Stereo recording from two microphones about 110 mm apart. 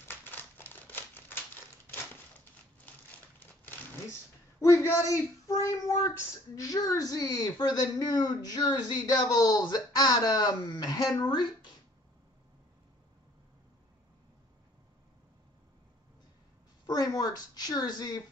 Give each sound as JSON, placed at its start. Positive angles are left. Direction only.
{"t": 0.0, "sound": "crumpling", "side_deg": 20}
{"t": 3.3, "sound": "speech", "side_deg": 20}
{"t": 16.8, "sound": "a woman's voice", "side_deg": 35}